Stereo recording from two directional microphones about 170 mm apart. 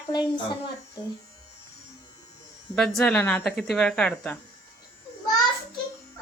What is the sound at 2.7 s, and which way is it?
Speech, 5° left (ahead or behind).